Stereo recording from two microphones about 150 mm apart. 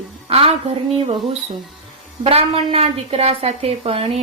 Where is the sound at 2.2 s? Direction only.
40° right (ahead or behind).